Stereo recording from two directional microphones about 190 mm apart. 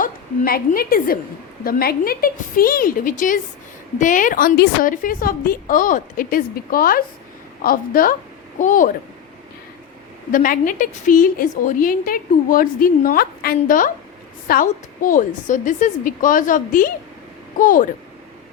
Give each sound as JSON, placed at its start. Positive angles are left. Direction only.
{"t": 0.0, "sound": "a woman's voice", "side_deg": 50}
{"t": 10.3, "sound": "a woman's voice", "side_deg": 45}